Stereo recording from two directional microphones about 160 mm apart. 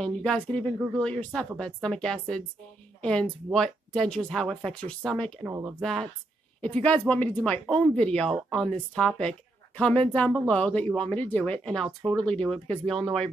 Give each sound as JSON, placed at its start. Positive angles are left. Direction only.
{"t": 0.0, "sound": "speech", "side_deg": 5}
{"t": 5.4, "sound": "speech", "side_deg": -20}
{"t": 5.8, "sound": "speech", "side_deg": 5}